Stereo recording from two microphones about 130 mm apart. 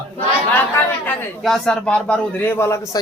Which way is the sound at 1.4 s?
5° left (ahead or behind).